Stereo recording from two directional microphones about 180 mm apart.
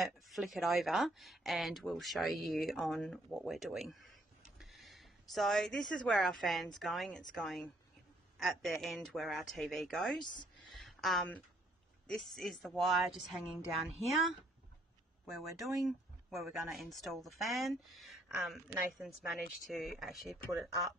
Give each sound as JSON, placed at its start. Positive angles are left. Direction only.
{"t": 0.0, "sound": "speech", "side_deg": 0}
{"t": 10.2, "sound": "speech", "side_deg": 25}
{"t": 10.7, "sound": "a sound", "side_deg": 0}
{"t": 12.1, "sound": "speech", "side_deg": 0}
{"t": 15.2, "sound": "speech", "side_deg": 0}